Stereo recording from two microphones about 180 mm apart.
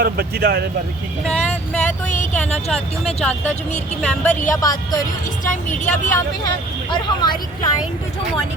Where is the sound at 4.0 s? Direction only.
5° left (ahead or behind).